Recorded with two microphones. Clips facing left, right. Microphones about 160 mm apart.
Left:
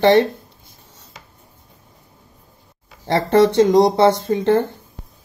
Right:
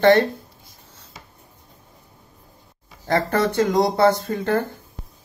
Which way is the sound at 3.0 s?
25° left (ahead or behind).